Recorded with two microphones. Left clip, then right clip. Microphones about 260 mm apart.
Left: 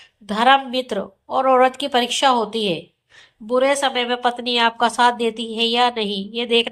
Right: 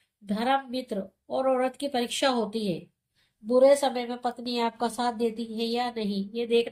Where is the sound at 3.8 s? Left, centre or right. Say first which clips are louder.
Left 8 dB; centre.